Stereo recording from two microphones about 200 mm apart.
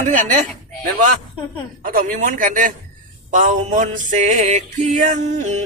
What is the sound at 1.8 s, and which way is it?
Speech, 45° right (ahead or behind).